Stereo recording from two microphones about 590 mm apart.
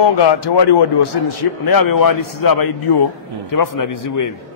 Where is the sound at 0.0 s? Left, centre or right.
Left.